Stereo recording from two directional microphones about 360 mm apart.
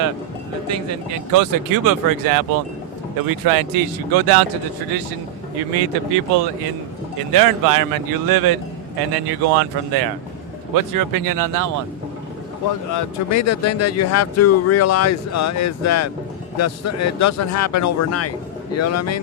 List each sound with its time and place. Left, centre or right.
0.7 s speech: right
5.7 s speech: right
7.2 s speech: right
9.2 s speech: right
10.8 s speech: right
12.9 s speech: left